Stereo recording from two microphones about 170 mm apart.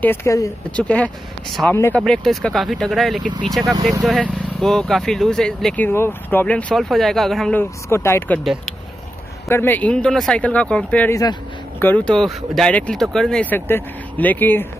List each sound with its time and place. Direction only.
0.0 s speech: 15° left (ahead or behind)
7.9 s speech: 15° left (ahead or behind)
9.5 s speech: 10° left (ahead or behind)